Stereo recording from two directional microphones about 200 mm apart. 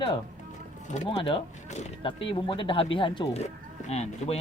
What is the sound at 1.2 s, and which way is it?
Speech, 25° left (ahead or behind).